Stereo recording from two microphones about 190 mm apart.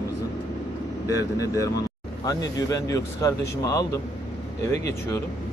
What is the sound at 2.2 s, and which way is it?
Speech, 15° left (ahead or behind).